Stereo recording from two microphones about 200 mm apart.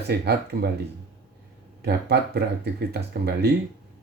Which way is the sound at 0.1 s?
55° right (ahead or behind).